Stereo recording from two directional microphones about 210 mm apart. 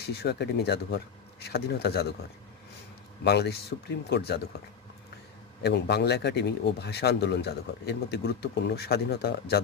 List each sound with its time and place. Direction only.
0.0 s speech: 50° left (ahead or behind)
3.2 s speech: 50° left (ahead or behind)
5.6 s speech: 50° left (ahead or behind)